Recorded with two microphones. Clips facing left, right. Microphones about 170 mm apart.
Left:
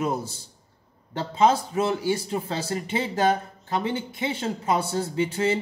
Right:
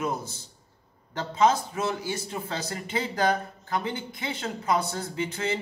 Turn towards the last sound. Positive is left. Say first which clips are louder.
# left 6 dB
turn(degrees=30)  # may be behind; listen again after turning